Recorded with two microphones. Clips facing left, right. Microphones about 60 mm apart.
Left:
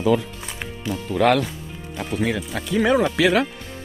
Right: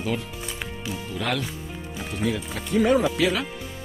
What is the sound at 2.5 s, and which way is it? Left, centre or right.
Speech, left.